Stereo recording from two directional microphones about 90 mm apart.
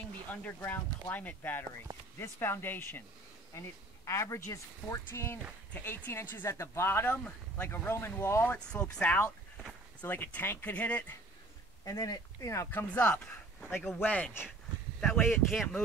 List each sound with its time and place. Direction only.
0.3 s speech: 20° left (ahead or behind)
5.7 s speech: 15° left (ahead or behind)
8.5 s speech: 15° left (ahead or behind)
11.8 s speech: 40° left (ahead or behind)
12.7 s speech: 15° left (ahead or behind)
13.7 s speech: 25° left (ahead or behind)
15.5 s speech: 5° left (ahead or behind)